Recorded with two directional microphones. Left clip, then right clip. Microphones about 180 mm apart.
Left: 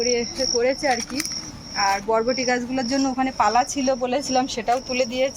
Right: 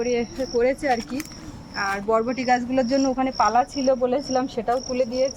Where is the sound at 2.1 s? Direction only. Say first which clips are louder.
Even; 80° right.